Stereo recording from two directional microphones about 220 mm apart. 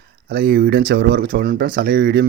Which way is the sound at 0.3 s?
45° right (ahead or behind).